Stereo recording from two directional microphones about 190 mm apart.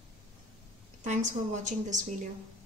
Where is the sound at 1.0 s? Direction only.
40° right (ahead or behind).